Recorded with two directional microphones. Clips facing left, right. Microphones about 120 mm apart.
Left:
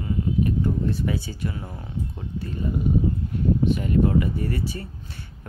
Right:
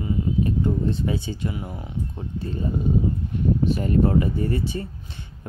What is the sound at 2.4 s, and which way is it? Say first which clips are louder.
Speech: right 1 dB; 30° right (ahead or behind).